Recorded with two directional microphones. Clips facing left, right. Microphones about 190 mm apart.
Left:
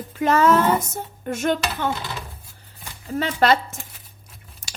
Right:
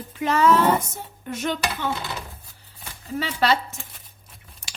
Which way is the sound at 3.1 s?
50° left (ahead or behind).